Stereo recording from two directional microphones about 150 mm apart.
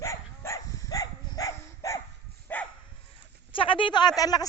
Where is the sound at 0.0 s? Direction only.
20° left (ahead or behind).